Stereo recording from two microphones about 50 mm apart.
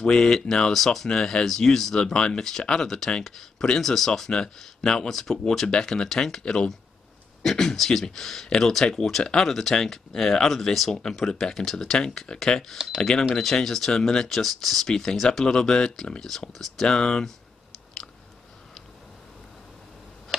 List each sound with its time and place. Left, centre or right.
0.0 s speech: centre
6.4 s speech: centre
7.4 s speech: centre
12.8 s speech: centre
13.3 s speech: centre